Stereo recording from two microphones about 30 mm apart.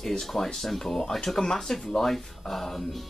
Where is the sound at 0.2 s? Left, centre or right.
Centre.